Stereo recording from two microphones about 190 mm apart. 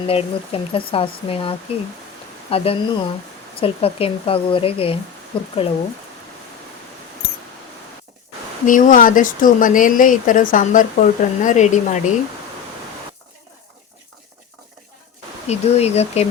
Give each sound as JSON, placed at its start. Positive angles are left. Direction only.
{"t": 0.1, "sound": "speech", "side_deg": 30}
{"t": 8.6, "sound": "speech", "side_deg": 45}
{"t": 15.4, "sound": "speech", "side_deg": 35}